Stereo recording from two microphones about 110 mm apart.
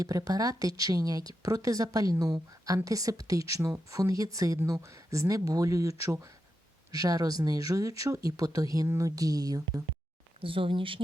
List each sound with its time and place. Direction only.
0.0 s speech: 30° right (ahead or behind)
10.4 s speech: 50° right (ahead or behind)